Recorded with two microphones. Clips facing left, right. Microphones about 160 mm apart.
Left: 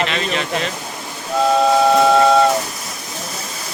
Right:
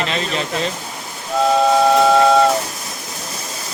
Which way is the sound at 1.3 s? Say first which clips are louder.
Even; centre (ahead or behind).